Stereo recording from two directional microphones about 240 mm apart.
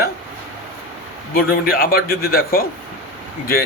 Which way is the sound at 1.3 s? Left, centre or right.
Left.